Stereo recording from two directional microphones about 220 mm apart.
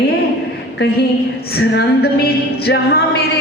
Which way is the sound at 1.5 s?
45° left (ahead or behind).